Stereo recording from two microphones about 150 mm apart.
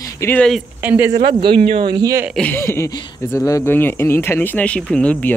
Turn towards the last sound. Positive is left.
turn(degrees=10)  # may be behind; listen again after turning